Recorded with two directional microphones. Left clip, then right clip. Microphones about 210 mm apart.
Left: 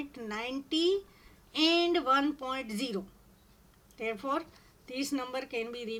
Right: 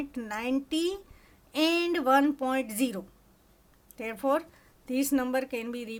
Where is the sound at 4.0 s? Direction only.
50° right (ahead or behind).